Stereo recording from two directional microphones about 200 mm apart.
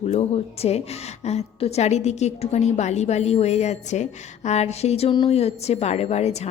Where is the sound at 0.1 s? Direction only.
30° left (ahead or behind).